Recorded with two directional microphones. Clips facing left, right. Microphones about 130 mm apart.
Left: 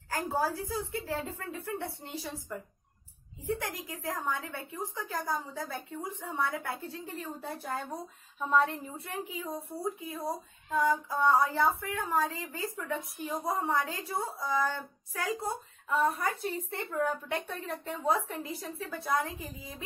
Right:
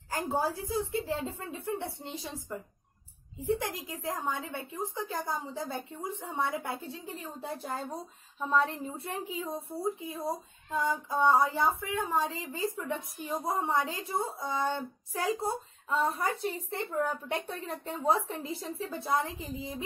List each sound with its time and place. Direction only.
0.1 s a woman's voice: 25° right (ahead or behind)